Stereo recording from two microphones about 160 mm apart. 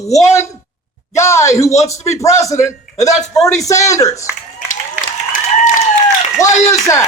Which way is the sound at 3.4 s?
Centre (ahead or behind).